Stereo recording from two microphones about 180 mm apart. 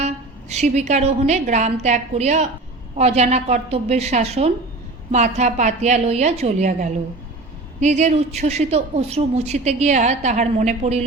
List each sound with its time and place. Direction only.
0.0 s a woman's voice: 40° right (ahead or behind)